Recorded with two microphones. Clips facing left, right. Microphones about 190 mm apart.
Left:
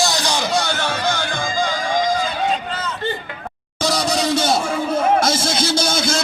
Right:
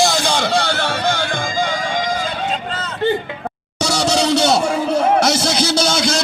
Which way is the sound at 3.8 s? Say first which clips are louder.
Right 2 dB; 75° right (ahead or behind).